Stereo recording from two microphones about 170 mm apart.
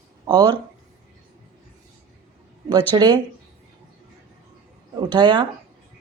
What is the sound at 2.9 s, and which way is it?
Speech, 25° right (ahead or behind).